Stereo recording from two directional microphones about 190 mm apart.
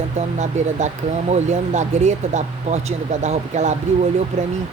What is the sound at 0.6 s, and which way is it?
Speech, 40° right (ahead or behind).